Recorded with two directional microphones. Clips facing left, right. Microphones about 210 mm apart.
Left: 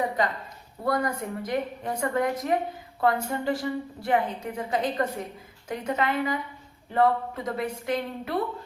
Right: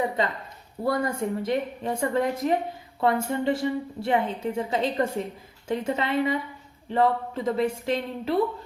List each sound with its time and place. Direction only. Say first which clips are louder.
0.9 s a woman's voice: right 2 dB; 25° right (ahead or behind)